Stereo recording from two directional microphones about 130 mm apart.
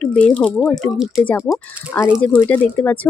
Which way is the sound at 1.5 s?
10° left (ahead or behind).